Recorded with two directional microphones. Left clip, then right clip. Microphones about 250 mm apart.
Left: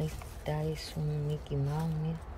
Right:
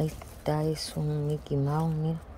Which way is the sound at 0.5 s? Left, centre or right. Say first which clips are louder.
Right 7 dB; right.